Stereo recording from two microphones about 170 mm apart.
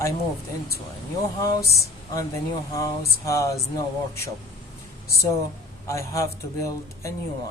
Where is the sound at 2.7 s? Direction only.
20° left (ahead or behind).